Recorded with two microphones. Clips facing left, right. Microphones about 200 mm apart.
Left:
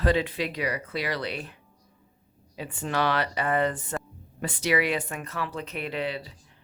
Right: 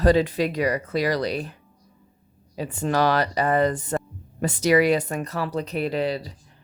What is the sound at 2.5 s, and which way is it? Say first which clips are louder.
Speech: right 6 dB; 40° right (ahead or behind).